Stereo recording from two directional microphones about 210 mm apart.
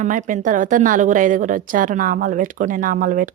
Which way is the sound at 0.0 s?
35° right (ahead or behind).